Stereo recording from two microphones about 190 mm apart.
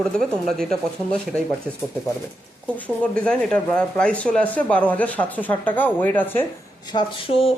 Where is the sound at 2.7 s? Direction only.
5° left (ahead or behind).